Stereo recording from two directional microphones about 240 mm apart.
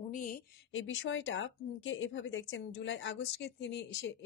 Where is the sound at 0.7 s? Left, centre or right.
Left.